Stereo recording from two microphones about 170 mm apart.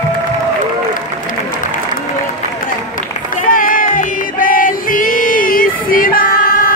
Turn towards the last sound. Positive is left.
turn(degrees=55)  # may be behind; listen again after turning